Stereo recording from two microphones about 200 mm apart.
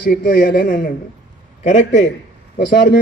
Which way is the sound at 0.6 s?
45° left (ahead or behind).